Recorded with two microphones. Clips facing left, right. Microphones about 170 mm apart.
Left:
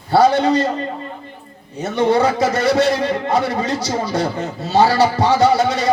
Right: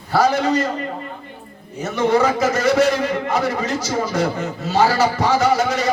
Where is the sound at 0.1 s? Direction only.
30° left (ahead or behind).